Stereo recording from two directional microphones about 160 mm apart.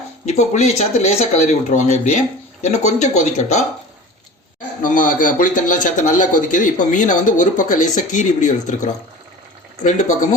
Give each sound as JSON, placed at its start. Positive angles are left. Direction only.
{"t": 0.3, "sound": "a man's voice", "side_deg": 45}
{"t": 4.8, "sound": "a man's voice", "side_deg": 55}